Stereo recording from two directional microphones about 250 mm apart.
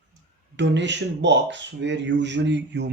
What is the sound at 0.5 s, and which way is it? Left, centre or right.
Speech, right.